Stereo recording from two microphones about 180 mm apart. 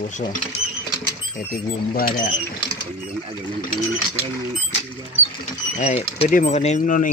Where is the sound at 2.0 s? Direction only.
50° left (ahead or behind).